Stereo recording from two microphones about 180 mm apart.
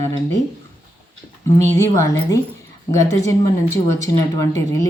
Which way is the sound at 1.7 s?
15° left (ahead or behind).